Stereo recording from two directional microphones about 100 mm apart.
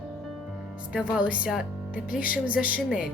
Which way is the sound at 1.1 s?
10° right (ahead or behind).